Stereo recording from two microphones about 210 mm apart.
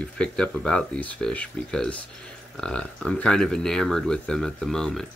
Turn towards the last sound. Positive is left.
turn(degrees=0)  # may be behind; listen again after turning